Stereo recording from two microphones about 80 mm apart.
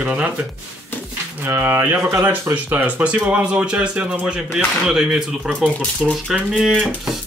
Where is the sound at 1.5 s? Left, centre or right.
Right.